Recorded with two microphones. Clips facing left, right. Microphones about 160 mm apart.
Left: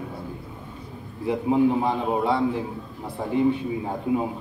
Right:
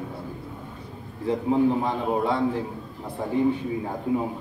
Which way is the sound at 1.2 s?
15° left (ahead or behind).